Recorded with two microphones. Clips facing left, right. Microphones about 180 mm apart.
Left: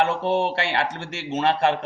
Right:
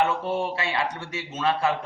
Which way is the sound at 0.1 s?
75° left (ahead or behind).